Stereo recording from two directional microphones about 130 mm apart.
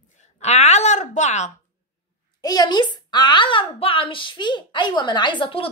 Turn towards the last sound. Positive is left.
turn(degrees=40)  # may be behind; listen again after turning